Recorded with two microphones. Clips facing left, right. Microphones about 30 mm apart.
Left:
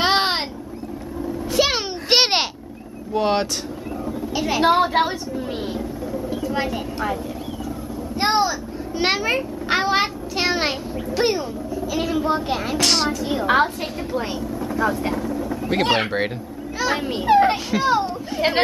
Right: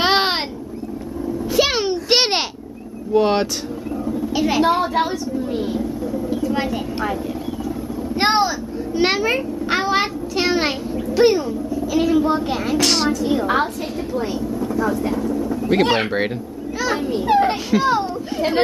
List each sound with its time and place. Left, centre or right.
0.0 s a sound: centre
1.5 s a sound: centre
3.1 s speech: centre
4.0 s a sound: centre
4.6 s a woman's voice: centre
5.8 s vehicle: centre
8.5 s a child's voice: centre
14.5 s vehicle: centre
15.1 s a woman's voice: centre
15.7 s a child's voice: centre
17.3 s a child's voice: centre